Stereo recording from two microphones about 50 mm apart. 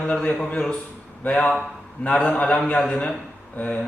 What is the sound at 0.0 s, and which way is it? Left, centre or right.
A man's voice, left.